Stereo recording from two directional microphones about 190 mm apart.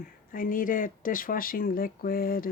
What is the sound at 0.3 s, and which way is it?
Speech, 45° left (ahead or behind).